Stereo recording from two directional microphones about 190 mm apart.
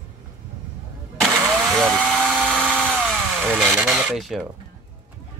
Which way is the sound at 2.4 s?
5° left (ahead or behind).